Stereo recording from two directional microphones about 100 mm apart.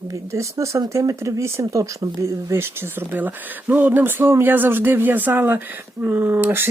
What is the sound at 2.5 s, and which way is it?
Speech, 25° right (ahead or behind).